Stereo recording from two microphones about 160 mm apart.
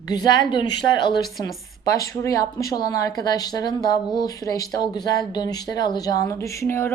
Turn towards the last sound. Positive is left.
turn(degrees=15)  # may be behind; listen again after turning